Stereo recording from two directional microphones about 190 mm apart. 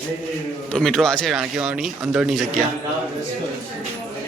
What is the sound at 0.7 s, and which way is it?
Speech, centre (ahead or behind).